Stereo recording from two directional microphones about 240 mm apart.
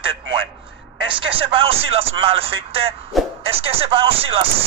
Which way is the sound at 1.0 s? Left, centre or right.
Right.